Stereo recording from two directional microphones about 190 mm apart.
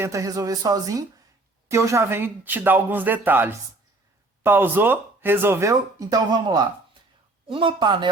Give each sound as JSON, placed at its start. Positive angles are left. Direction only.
{"t": 0.0, "sound": "speech", "side_deg": -15}